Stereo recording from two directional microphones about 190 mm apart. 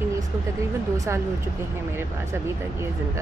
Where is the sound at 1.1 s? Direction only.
15° right (ahead or behind).